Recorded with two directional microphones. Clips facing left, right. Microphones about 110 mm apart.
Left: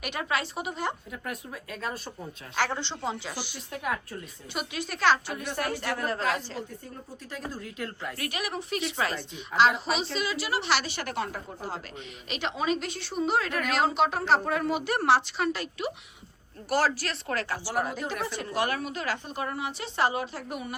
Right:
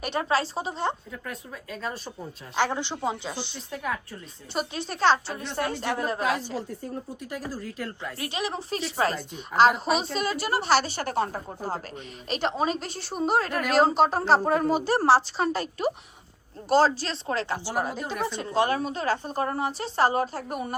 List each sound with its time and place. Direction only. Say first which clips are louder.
0.0 s a woman's voice: right 5 dB; 30° right (ahead or behind)
1.1 s speech: left 1 dB; 10° left (ahead or behind)
1.7 s speech: right 2 dB; centre (ahead or behind)
2.6 s speech: right 3 dB; 15° right (ahead or behind)
7.3 s speech: even; 5° right (ahead or behind)
8.2 s a woman's voice: right 3 dB; 25° right (ahead or behind)
9.7 s speech: right 4 dB; centre (ahead or behind)
10.0 s a woman's voice: right 3 dB; 45° right (ahead or behind)
16.6 s a woman's voice: right 5 dB; 25° right (ahead or behind); by 20.7 s 40° right (ahead or behind)